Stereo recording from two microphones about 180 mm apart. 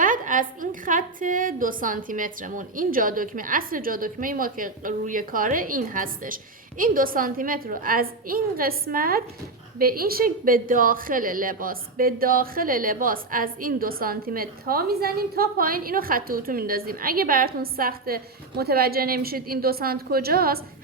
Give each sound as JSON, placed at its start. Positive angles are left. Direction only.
{"t": 0.0, "sound": "a woman's voice", "side_deg": -50}